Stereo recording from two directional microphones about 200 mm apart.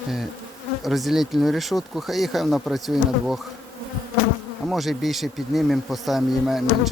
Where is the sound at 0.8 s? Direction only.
Centre (ahead or behind).